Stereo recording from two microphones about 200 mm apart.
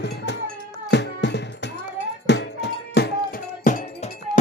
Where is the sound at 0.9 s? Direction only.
60° left (ahead or behind).